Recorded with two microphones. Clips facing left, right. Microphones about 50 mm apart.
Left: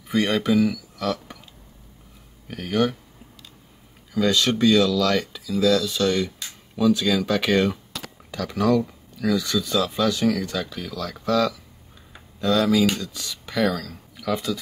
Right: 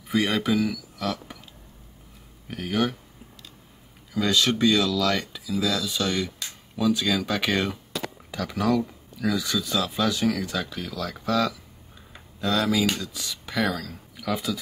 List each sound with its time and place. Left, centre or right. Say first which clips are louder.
0.1 s speech: left 3 dB; centre
2.4 s speech: left 3 dB; centre
4.1 s speech: left 2 dB; centre